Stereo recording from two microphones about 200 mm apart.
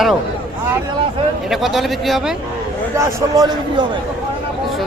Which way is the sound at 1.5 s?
Centre (ahead or behind).